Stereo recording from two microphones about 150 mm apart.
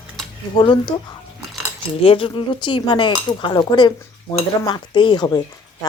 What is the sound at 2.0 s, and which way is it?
A woman's voice, 35° left (ahead or behind).